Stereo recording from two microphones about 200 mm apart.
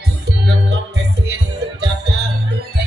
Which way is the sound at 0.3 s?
55° right (ahead or behind).